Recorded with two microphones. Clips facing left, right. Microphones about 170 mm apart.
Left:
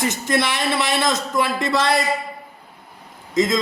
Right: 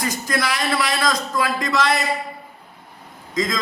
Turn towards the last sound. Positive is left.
turn(degrees=25)  # may be behind; listen again after turning